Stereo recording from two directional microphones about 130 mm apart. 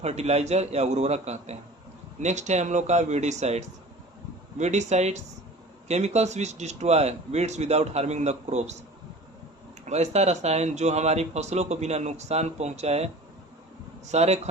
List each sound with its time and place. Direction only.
0.0 s speech: 55° right (ahead or behind)
9.8 s speech: 60° right (ahead or behind)
14.1 s speech: 60° right (ahead or behind)